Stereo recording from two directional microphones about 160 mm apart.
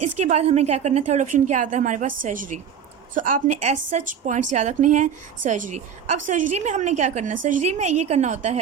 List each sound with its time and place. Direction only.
0.0 s a woman's voice: 40° right (ahead or behind)